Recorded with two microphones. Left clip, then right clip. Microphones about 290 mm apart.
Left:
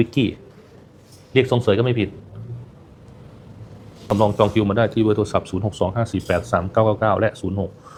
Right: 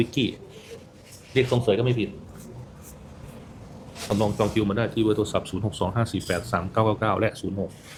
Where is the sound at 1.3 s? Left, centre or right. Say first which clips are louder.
Left 5 dB; left.